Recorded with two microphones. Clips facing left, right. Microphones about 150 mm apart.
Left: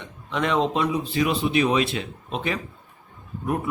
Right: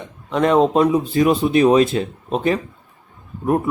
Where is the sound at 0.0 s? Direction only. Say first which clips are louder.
Right 8 dB; 40° right (ahead or behind).